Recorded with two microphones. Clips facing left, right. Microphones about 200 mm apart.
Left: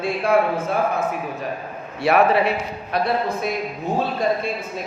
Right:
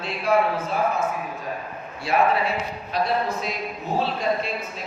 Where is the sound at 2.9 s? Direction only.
55° left (ahead or behind).